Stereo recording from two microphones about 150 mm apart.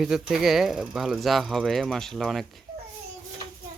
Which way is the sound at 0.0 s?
5° right (ahead or behind).